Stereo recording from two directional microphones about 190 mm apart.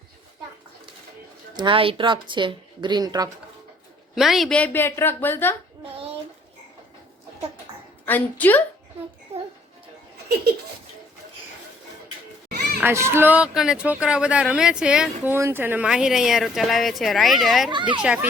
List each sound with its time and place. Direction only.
1.5 s speech: 25° right (ahead or behind)
4.1 s a woman's voice: centre (ahead or behind)
8.0 s a woman's voice: 10° left (ahead or behind)
10.2 s speech: 55° right (ahead or behind)
12.8 s speech: 15° right (ahead or behind)
17.7 s speech: 25° right (ahead or behind)
18.0 s a child's voice: 5° right (ahead or behind)